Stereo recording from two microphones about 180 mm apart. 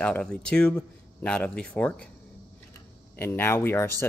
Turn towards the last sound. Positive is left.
turn(degrees=15)  # may be behind; listen again after turning